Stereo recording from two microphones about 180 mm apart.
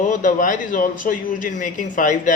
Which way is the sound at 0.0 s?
45° left (ahead or behind).